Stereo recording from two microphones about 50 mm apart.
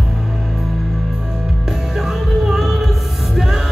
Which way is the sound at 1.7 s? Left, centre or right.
Centre.